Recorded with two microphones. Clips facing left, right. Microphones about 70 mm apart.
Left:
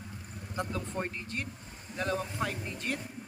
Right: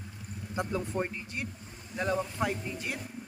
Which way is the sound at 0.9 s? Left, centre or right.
Centre.